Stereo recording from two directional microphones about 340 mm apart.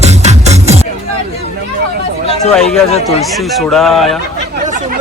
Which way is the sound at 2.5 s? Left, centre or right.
Centre.